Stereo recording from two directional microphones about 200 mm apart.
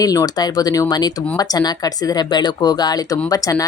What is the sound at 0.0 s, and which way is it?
Speech, 20° left (ahead or behind).